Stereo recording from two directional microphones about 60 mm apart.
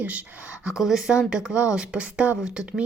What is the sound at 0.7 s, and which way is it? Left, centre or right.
A woman's voice, centre.